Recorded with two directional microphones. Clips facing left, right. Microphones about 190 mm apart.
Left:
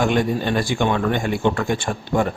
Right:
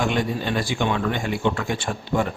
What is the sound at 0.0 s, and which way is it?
Speech, 50° left (ahead or behind).